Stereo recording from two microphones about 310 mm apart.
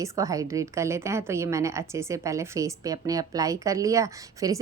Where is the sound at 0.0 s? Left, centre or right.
Centre.